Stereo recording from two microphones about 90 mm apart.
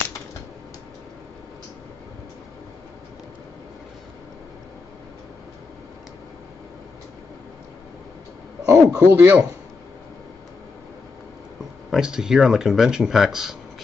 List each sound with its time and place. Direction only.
8.6 s a sound: 40° right (ahead or behind)
9.0 s a man's voice: 20° right (ahead or behind)
11.9 s speech: 5° right (ahead or behind)